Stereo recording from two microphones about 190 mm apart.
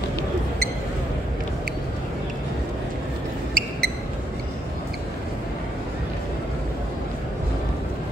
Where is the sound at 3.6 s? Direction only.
50° right (ahead or behind).